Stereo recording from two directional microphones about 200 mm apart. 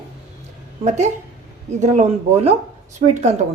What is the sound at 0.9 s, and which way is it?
Speech, 35° right (ahead or behind).